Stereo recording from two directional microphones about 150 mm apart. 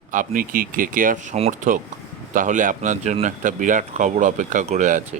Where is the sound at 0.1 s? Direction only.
65° right (ahead or behind).